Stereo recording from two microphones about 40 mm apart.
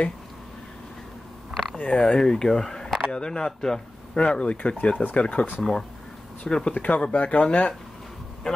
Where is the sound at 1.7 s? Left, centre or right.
Left.